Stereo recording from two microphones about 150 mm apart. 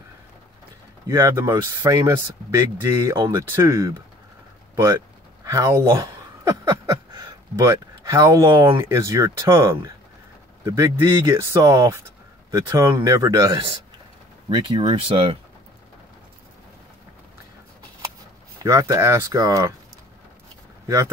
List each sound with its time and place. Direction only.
1.0 s speech: 20° right (ahead or behind)
4.8 s chuckle: 25° right (ahead or behind)
7.5 s speech: 20° right (ahead or behind)
14.8 s speech: 35° right (ahead or behind)
18.6 s speech: 20° right (ahead or behind)
20.8 s speech: 20° right (ahead or behind)